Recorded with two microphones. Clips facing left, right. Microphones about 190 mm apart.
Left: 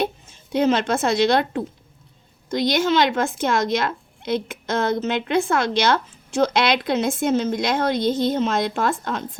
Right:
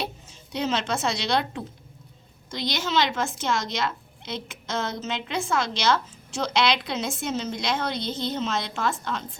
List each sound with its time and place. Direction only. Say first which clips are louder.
0.0 s a woman's voice: left 8 dB; 55° left (ahead or behind)